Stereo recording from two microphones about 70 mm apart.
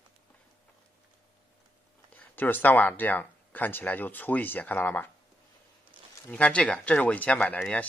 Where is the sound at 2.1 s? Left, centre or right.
Left.